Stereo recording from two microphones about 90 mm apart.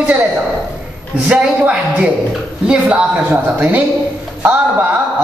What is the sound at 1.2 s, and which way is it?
A woman's voice, 15° right (ahead or behind).